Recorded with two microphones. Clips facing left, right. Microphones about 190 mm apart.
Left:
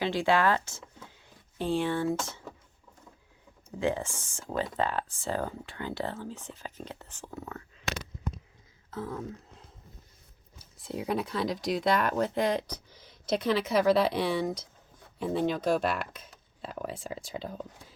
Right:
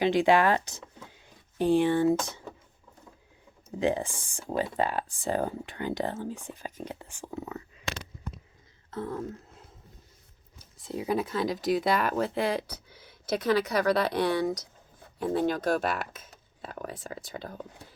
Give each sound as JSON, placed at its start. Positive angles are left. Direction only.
{"t": 0.0, "sound": "speech", "side_deg": -20}
{"t": 3.7, "sound": "speech", "side_deg": -15}
{"t": 8.9, "sound": "a sound", "side_deg": 0}
{"t": 10.6, "sound": "speech", "side_deg": 0}
{"t": 12.9, "sound": "a sound", "side_deg": -60}
{"t": 13.3, "sound": "speech", "side_deg": 0}